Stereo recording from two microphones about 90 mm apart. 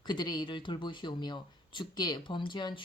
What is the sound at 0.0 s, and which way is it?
A woman's voice, 55° left (ahead or behind).